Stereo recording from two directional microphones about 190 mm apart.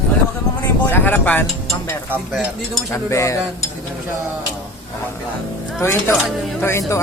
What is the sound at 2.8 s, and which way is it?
Speech, 15° left (ahead or behind).